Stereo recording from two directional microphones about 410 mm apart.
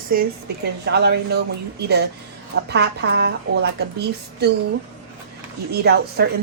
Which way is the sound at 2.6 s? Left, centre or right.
Right.